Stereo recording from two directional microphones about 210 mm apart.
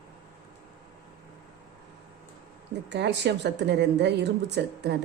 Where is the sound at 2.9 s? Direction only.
55° right (ahead or behind).